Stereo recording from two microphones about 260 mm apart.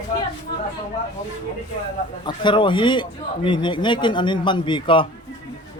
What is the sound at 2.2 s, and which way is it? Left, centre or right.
A man's voice, centre.